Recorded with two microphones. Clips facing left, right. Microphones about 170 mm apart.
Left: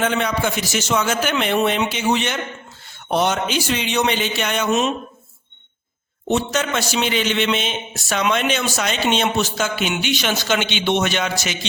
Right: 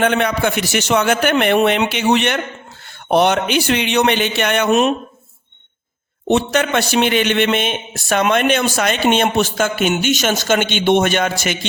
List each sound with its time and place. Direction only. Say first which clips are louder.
0.0 s a man's voice: right 4 dB; 60° right (ahead or behind)
6.2 s a man's voice: right 4 dB; 60° right (ahead or behind)